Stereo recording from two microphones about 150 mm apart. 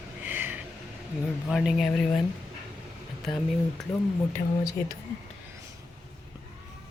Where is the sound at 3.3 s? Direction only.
30° left (ahead or behind).